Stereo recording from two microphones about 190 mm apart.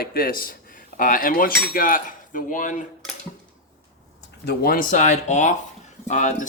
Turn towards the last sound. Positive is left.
turn(degrees=40)  # may be behind; listen again after turning